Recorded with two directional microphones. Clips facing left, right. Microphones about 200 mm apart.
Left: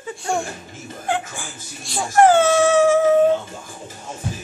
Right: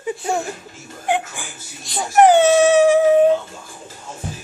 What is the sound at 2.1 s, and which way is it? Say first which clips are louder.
Dog: right 2 dB; 20° right (ahead or behind).